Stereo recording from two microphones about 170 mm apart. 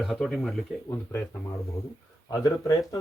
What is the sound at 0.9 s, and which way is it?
Speech, 15° left (ahead or behind).